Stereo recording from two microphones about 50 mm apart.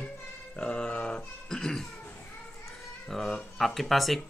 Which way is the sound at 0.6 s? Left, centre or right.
Centre.